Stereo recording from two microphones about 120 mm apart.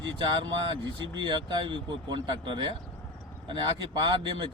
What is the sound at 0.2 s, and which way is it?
A man's voice, 45° right (ahead or behind).